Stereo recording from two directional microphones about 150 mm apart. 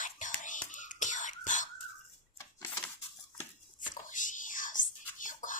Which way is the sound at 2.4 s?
20° left (ahead or behind).